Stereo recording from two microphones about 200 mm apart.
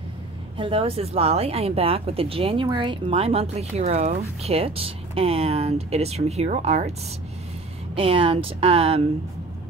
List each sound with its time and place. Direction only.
0.6 s speech: 25° right (ahead or behind)
7.9 s speech: 25° right (ahead or behind)